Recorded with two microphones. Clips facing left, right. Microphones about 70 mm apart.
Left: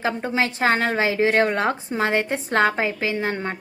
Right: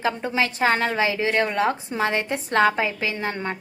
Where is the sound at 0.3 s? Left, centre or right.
Left.